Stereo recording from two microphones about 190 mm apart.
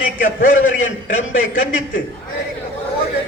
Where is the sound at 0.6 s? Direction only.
90° left.